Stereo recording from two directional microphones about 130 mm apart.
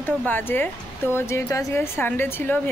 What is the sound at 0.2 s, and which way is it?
A woman's voice, 15° left (ahead or behind).